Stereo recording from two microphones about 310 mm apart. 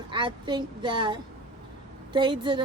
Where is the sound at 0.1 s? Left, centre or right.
Centre.